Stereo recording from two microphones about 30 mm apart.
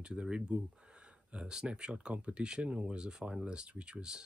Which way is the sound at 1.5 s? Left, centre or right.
Right.